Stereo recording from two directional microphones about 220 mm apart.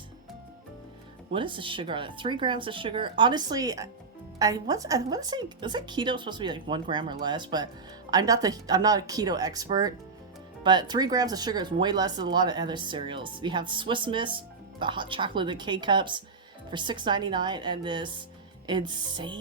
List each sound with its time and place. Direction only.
1.3 s speech: 20° right (ahead or behind)